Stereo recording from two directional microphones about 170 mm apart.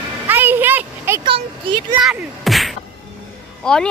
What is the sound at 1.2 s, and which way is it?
Speech, 30° right (ahead or behind).